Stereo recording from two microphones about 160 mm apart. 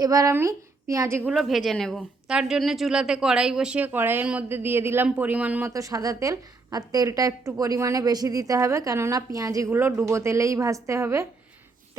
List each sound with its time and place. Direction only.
0.0 s a woman's voice: 20° right (ahead or behind)
1.3 s a woman's voice: centre (ahead or behind); by 11.3 s 15° right (ahead or behind)